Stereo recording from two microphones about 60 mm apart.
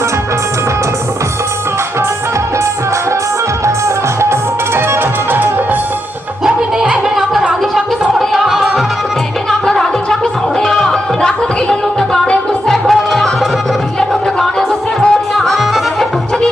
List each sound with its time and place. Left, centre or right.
3.8 s music: right
6.4 s music: centre
8.2 s music: centre
9.6 s music: centre